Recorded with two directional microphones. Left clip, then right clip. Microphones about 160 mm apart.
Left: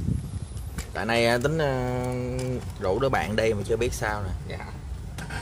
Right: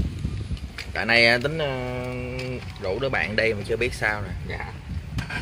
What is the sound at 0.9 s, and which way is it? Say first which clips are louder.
Speech: right 5 dB; 5° left (ahead or behind).